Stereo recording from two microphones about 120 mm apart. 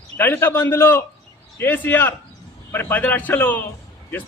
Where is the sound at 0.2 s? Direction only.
15° left (ahead or behind).